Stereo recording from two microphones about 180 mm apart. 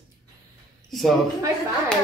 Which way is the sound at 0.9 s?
Centre (ahead or behind).